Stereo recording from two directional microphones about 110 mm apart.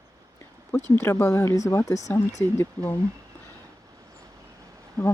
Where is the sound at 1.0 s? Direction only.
20° left (ahead or behind).